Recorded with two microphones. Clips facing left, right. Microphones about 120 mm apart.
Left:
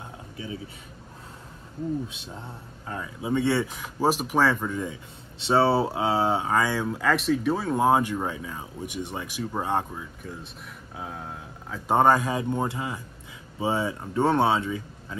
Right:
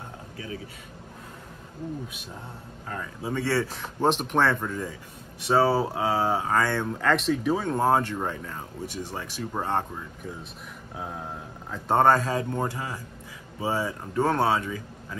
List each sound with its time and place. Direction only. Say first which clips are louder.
2.9 s speech: left 4 dB; 15° left (ahead or behind)
3.7 s speech: even; 5° left (ahead or behind)
5.4 s speech: left 1 dB; 25° left (ahead or behind); by 10.0 s 10° left (ahead or behind)
10.2 s speech: right 1 dB; centre (ahead or behind)
11.9 s speech: even; 15° left (ahead or behind)